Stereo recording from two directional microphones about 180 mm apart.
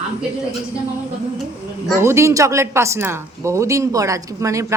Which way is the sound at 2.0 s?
15° right (ahead or behind).